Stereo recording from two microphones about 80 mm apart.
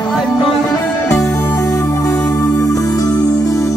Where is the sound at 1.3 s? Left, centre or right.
Left.